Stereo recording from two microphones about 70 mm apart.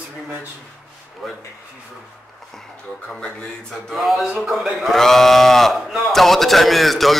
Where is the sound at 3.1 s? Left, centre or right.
Centre.